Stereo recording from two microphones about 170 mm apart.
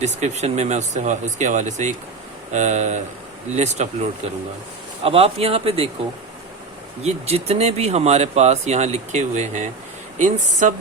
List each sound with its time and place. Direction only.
0.0 s speech: 40° right (ahead or behind)
5.0 s speech: 35° right (ahead or behind)
7.0 s speech: 40° right (ahead or behind)